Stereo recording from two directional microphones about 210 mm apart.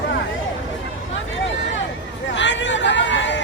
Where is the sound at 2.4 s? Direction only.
60° left (ahead or behind).